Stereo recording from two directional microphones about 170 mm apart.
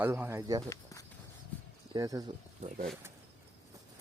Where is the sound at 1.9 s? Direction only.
20° right (ahead or behind).